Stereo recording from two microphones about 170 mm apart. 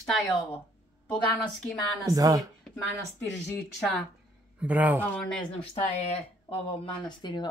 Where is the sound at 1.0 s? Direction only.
5° left (ahead or behind).